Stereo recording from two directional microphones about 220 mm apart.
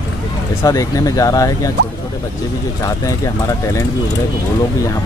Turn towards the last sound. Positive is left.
turn(degrees=15)  # may be behind; listen again after turning